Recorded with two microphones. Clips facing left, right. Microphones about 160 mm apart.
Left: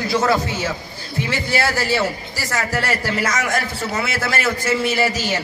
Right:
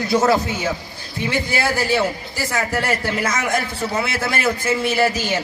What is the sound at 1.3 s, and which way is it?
A man's voice, 15° right (ahead or behind).